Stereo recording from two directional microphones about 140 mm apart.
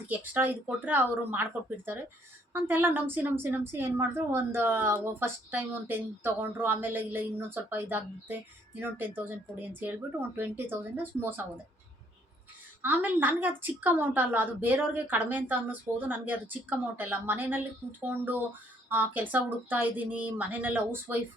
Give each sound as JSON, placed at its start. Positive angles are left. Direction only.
{"t": 0.1, "sound": "a woman's voice", "side_deg": -15}
{"t": 12.8, "sound": "a woman's voice", "side_deg": -10}